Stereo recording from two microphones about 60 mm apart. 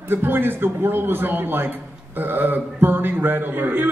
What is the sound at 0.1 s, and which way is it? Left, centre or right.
A man's voice, right.